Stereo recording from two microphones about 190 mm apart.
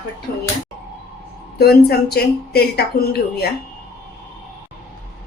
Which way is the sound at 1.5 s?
55° left (ahead or behind).